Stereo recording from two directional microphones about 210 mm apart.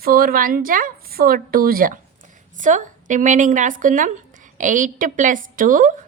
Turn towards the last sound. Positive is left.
turn(degrees=-40)  # may be behind; listen again after turning